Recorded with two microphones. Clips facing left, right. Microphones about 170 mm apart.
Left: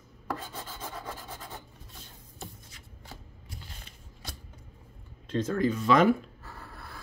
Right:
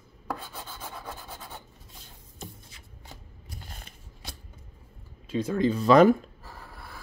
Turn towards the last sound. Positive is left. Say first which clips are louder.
# right 5 dB
turn(degrees=-35)  # may be behind; listen again after turning